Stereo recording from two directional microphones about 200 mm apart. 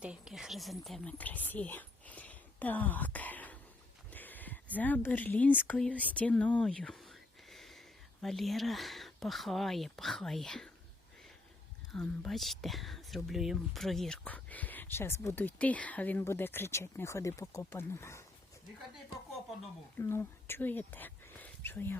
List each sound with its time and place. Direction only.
0.0 s whispering: 5° right (ahead or behind)
4.1 s speech: 10° left (ahead or behind)
11.9 s speech: centre (ahead or behind)
20.0 s speech: 10° left (ahead or behind)